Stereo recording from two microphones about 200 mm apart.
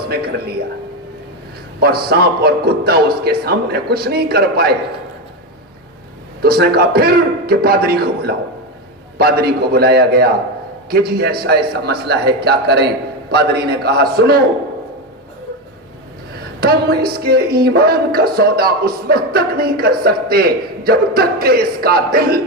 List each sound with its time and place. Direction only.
0.0 s music: 50° right (ahead or behind)
1.8 s music: 50° right (ahead or behind)
6.4 s music: 50° right (ahead or behind)
16.6 s music: 50° right (ahead or behind)